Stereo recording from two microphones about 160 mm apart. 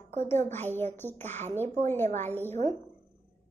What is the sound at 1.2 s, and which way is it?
Speech, 45° right (ahead or behind).